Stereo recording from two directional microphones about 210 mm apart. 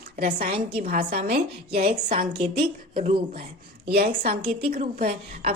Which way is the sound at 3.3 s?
50° right (ahead or behind).